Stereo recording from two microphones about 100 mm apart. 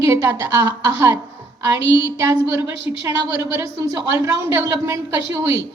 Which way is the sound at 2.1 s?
30° right (ahead or behind).